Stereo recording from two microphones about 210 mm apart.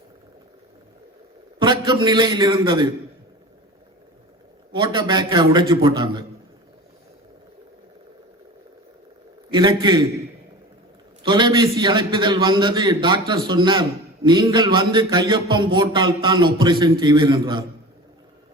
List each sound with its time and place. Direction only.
1.5 s a man's voice: 20° right (ahead or behind)
4.7 s a man's voice: 20° right (ahead or behind)
9.5 s a man's voice: 20° right (ahead or behind)
11.2 s a man's voice: 20° right (ahead or behind)